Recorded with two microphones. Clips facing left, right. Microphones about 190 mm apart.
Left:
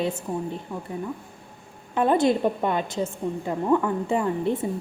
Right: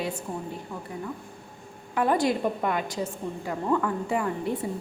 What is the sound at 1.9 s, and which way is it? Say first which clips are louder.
A woman's voice: left 4 dB; 25° left (ahead or behind).